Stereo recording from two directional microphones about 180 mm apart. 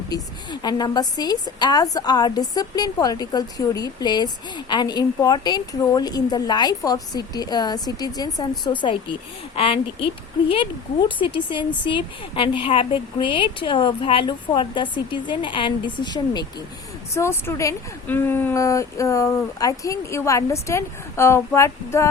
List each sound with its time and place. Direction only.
0.1 s a woman's voice: 20° left (ahead or behind)
11.2 s a woman's voice: 25° left (ahead or behind)